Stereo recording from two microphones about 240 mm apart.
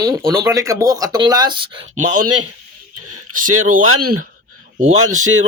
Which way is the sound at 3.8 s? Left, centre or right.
Right.